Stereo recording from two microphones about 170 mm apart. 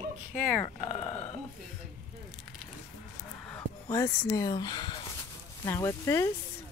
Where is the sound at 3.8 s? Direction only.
20° left (ahead or behind).